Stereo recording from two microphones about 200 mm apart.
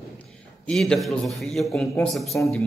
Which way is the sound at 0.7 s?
Centre (ahead or behind).